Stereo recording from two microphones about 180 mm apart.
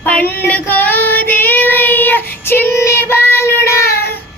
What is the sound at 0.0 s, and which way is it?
Child singing, 10° left (ahead or behind).